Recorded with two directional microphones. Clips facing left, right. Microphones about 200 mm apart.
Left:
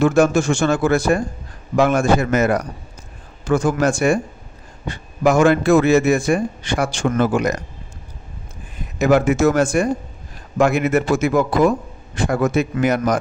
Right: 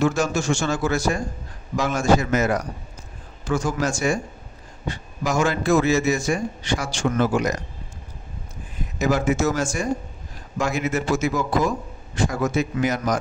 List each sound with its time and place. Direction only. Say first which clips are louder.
0.0 s a man's voice: left 7 dB; 55° left (ahead or behind)
9.0 s a man's voice: left 6 dB; 60° left (ahead or behind)